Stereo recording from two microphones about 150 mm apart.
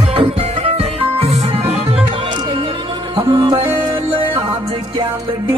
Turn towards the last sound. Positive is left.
turn(degrees=-30)  # may be behind; listen again after turning